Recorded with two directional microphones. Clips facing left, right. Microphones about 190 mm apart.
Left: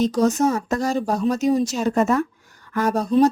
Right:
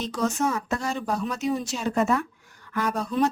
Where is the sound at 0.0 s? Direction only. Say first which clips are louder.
Left 8 dB; 40° left (ahead or behind).